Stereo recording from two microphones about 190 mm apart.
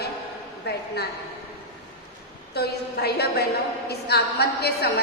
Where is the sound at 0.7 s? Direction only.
60° left (ahead or behind).